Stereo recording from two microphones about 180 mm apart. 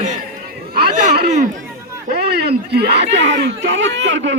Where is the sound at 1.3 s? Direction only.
40° right (ahead or behind).